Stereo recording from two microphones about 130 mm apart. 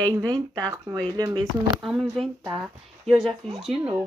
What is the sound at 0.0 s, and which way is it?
Speech, 30° right (ahead or behind).